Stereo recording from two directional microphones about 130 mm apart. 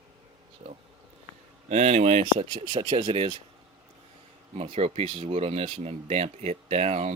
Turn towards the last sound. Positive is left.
turn(degrees=-55)  # may be behind; listen again after turning